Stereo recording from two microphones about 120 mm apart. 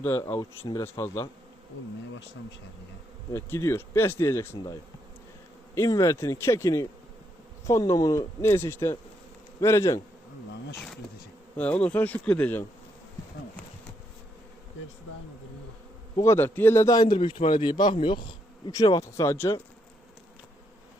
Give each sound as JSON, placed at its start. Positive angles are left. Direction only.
{"t": 0.0, "sound": "speech", "side_deg": 20}
{"t": 3.3, "sound": "speech", "side_deg": 20}
{"t": 5.7, "sound": "speech", "side_deg": 25}
{"t": 10.8, "sound": "speech", "side_deg": 0}
{"t": 16.2, "sound": "speech", "side_deg": 20}
{"t": 17.2, "sound": "speech", "side_deg": 45}